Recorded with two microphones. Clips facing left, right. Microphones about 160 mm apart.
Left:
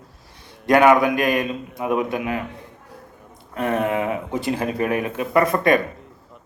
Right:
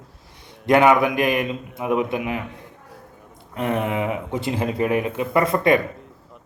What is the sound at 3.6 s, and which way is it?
Speech, 20° right (ahead or behind).